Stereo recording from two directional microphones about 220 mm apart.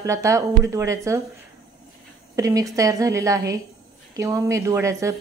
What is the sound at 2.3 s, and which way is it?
A woman's voice, 15° right (ahead or behind).